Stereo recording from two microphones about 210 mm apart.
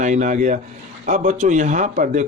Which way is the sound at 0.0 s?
35° right (ahead or behind).